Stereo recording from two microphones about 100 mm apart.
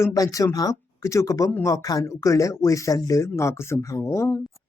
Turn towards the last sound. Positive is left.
turn(degrees=30)  # may be behind; listen again after turning